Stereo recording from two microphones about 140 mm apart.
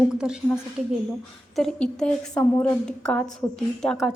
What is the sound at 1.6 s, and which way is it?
A woman's voice, 5° left (ahead or behind).